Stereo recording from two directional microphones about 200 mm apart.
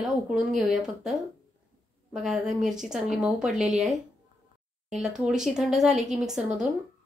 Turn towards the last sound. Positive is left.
turn(degrees=-5)  # may be behind; listen again after turning